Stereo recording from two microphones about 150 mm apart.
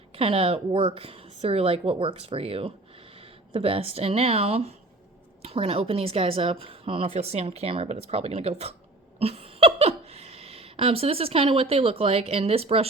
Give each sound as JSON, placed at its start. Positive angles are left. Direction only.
{"t": 0.2, "sound": "speech", "side_deg": -40}